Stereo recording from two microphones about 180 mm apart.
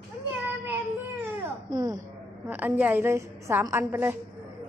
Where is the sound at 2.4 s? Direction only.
10° right (ahead or behind).